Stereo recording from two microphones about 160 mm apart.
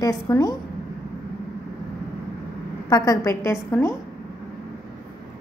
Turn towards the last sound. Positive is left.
turn(degrees=15)  # may be behind; listen again after turning